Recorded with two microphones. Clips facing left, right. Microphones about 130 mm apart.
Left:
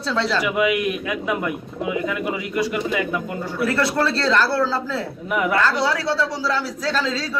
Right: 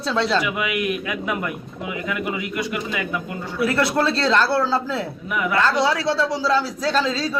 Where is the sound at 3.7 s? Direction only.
20° right (ahead or behind).